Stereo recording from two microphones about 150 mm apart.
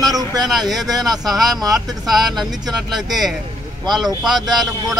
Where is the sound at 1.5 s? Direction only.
25° right (ahead or behind).